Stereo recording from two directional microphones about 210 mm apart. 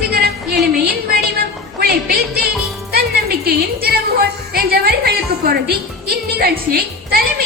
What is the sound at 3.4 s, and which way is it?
A woman's voice, 45° right (ahead or behind).